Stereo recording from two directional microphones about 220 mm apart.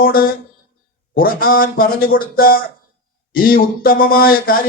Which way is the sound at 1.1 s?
40° left (ahead or behind).